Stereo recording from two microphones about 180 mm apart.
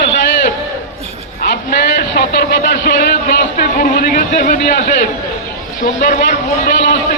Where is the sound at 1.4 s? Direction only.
60° left (ahead or behind).